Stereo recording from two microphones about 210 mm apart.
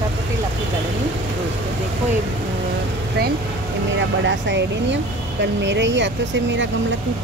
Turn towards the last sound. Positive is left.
turn(degrees=-60)  # may be behind; listen again after turning